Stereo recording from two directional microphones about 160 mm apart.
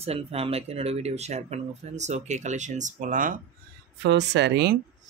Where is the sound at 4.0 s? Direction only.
90° right.